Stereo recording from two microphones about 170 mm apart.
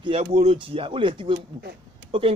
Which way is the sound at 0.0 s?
35° right (ahead or behind).